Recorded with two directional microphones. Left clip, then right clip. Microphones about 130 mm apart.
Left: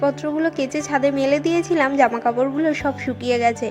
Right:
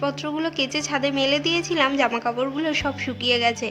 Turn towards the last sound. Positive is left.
turn(degrees=40)  # may be behind; listen again after turning